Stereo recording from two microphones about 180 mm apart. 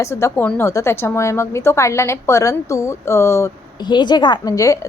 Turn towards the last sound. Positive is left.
turn(degrees=20)  # may be behind; listen again after turning